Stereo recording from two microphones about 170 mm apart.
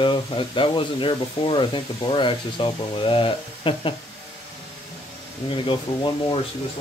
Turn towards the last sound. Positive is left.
turn(degrees=25)  # may be behind; listen again after turning